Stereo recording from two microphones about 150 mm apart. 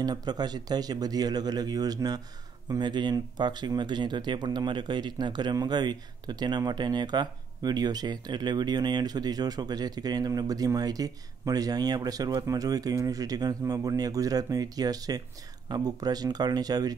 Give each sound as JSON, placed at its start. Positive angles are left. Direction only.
{"t": 0.0, "sound": "speech", "side_deg": -25}